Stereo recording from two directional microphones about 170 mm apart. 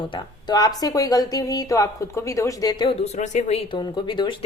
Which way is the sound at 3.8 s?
25° left (ahead or behind).